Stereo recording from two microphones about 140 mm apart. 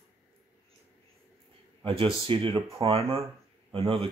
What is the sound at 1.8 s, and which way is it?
Speech, 40° right (ahead or behind).